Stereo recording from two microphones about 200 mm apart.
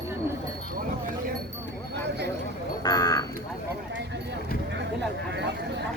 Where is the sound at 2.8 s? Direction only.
20° left (ahead or behind).